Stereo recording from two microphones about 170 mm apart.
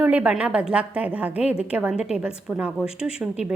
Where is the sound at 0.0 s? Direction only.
10° right (ahead or behind).